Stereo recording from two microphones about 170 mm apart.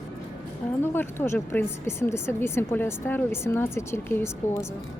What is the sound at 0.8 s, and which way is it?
Speech, 15° left (ahead or behind).